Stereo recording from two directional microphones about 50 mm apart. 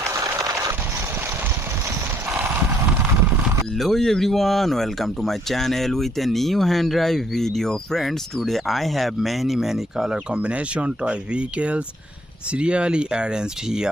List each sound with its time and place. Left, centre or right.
3.8 s speech: centre
10.3 s speech: right